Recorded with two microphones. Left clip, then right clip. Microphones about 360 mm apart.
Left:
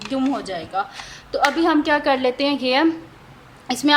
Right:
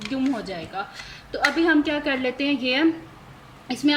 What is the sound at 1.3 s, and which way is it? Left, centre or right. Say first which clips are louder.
A woman's voice: left 3 dB; centre.